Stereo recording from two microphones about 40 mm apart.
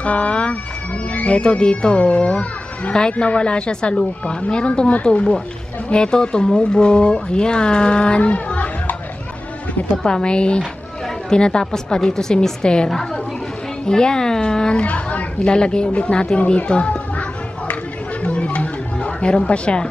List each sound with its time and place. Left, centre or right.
0.0 s speech: left
10.0 s speech: left
14.9 s speech: left
18.2 s music: left